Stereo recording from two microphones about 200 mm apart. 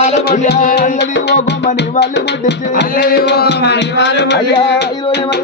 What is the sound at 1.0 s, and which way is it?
Music, 60° left (ahead or behind).